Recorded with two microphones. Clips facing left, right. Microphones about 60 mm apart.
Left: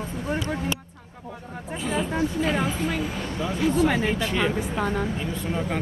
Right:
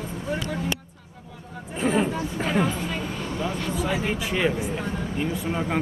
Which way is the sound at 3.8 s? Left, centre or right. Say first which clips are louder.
Left 5 dB; left.